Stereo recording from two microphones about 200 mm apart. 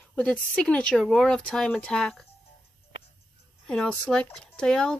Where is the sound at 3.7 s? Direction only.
5° left (ahead or behind).